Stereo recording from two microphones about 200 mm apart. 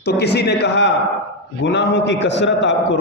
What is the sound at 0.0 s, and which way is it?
A man's voice, 55° left (ahead or behind).